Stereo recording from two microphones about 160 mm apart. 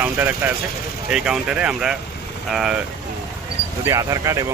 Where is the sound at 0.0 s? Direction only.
10° right (ahead or behind).